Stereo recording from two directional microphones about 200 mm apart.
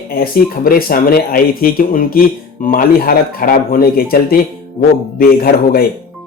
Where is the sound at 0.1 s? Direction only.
45° left (ahead or behind).